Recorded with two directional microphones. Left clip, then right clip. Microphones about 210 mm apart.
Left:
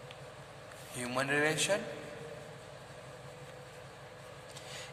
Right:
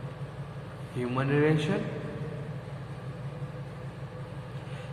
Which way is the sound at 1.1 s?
55° left (ahead or behind).